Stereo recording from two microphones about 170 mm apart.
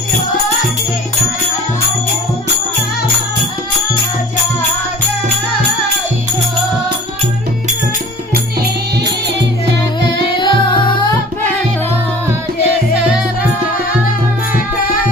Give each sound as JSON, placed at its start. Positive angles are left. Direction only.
{"t": 10.2, "sound": "music", "side_deg": 30}